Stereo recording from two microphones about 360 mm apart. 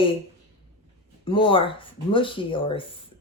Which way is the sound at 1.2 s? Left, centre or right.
Centre.